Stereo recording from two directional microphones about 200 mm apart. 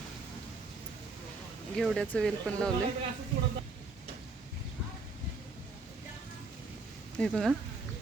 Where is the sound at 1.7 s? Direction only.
Centre (ahead or behind).